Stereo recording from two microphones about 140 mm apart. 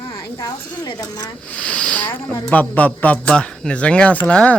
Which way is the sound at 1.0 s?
30° left (ahead or behind).